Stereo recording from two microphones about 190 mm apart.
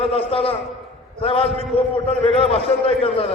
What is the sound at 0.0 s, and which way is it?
A man's voice, 30° left (ahead or behind).